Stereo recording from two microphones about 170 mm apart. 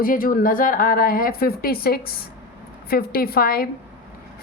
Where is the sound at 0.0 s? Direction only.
55° left (ahead or behind).